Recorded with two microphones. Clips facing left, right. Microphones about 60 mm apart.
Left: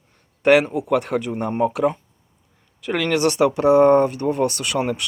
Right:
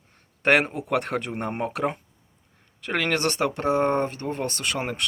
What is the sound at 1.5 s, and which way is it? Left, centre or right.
Speech, centre.